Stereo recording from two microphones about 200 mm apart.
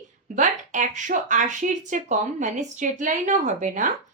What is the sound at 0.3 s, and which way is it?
Speech, 40° right (ahead or behind).